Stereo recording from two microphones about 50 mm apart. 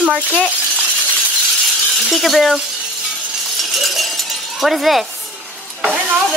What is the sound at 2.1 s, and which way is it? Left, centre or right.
Speech, centre.